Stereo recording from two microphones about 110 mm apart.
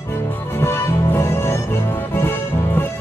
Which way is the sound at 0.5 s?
20° left (ahead or behind).